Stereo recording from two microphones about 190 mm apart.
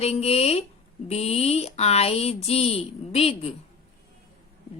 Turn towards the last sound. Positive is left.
turn(degrees=30)  # may be behind; listen again after turning